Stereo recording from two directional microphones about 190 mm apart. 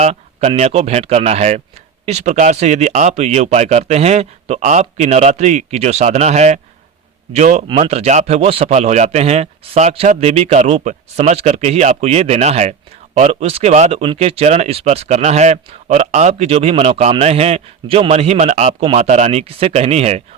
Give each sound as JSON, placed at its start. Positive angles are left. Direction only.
{"t": 0.0, "sound": "speech", "side_deg": -35}